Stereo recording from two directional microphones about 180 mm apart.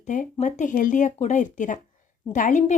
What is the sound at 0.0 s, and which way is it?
A woman's voice, 45° left (ahead or behind).